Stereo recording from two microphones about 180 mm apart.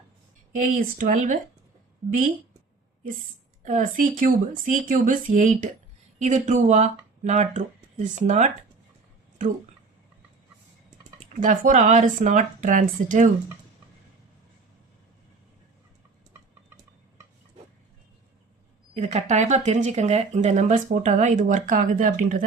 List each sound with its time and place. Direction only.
0.5 s speech: 45° right (ahead or behind)
3.6 s speech: 45° right (ahead or behind)
11.3 s speech: 45° right (ahead or behind)
18.9 s speech: 40° right (ahead or behind)